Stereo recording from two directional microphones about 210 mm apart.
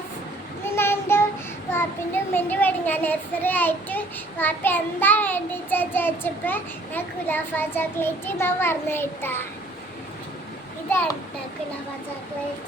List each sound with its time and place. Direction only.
0.6 s child singing: 10° left (ahead or behind)